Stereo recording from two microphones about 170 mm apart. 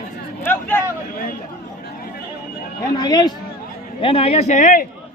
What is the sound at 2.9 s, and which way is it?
Speech, 25° left (ahead or behind).